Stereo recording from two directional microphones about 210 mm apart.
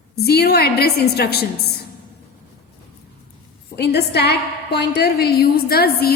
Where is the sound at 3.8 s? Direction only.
50° left (ahead or behind).